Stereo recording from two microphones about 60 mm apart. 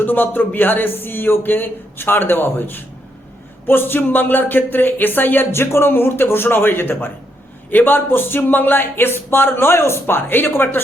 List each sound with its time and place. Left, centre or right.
0.0 s speech: left